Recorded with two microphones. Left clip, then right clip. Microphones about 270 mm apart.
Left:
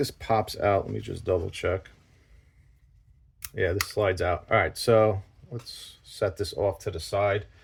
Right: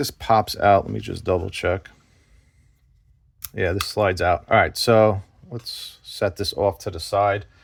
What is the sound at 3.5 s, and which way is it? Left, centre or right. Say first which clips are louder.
Speech: right 3 dB; right.